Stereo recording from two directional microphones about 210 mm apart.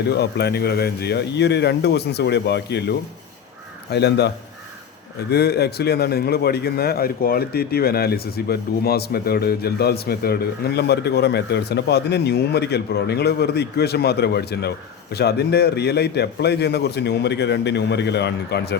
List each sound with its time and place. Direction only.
0.1 s a man's voice: 50° left (ahead or behind)
5.3 s a man's voice: 50° left (ahead or behind)